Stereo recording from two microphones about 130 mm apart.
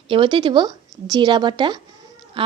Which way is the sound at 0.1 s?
40° right (ahead or behind).